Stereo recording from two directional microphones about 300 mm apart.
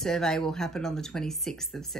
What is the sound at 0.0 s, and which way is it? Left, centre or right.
Speech, centre.